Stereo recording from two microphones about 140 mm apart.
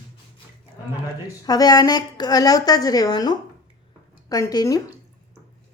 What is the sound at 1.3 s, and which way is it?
A woman's voice, 25° left (ahead or behind).